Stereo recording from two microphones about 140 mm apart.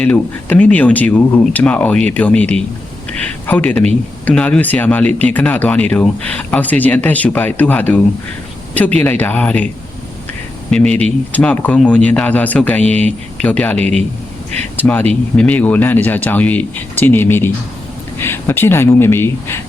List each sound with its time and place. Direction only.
0.0 s speech: 10° left (ahead or behind)
9.0 s speech: 15° left (ahead or behind)
10.7 s speech: 10° left (ahead or behind)